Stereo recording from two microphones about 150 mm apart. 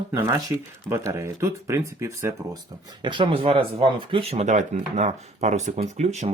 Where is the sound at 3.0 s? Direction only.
35° right (ahead or behind).